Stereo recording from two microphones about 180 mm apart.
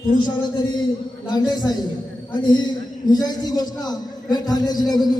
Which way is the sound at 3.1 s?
20° left (ahead or behind).